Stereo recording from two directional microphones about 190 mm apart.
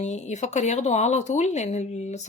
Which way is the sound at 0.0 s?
35° left (ahead or behind).